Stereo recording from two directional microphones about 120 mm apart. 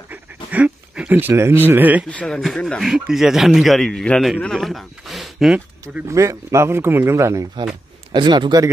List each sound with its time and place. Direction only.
0.1 s pant: 15° right (ahead or behind)
2.0 s a man's voice: 10° left (ahead or behind)
6.0 s speech: 25° right (ahead or behind)
8.1 s speech: 40° right (ahead or behind)